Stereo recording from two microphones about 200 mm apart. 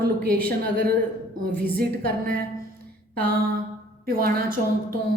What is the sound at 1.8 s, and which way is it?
Speech, 50° right (ahead or behind).